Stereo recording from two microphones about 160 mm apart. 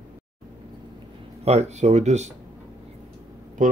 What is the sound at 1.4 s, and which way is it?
Speech, 40° right (ahead or behind).